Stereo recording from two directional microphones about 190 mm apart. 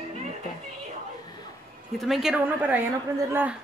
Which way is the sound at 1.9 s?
Centre (ahead or behind).